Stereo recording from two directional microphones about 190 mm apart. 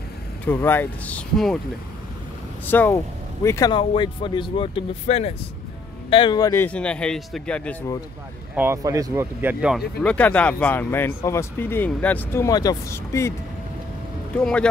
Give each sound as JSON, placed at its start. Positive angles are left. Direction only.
{"t": 0.5, "sound": "speech", "side_deg": 10}
{"t": 2.6, "sound": "speech", "side_deg": 10}
{"t": 3.7, "sound": "speech", "side_deg": 25}
{"t": 8.5, "sound": "speech", "side_deg": -15}
{"t": 14.3, "sound": "speech", "side_deg": 5}